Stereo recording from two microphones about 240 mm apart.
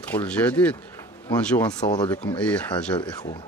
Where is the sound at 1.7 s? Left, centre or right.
Centre.